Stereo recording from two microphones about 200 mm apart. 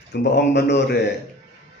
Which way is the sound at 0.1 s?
55° left (ahead or behind).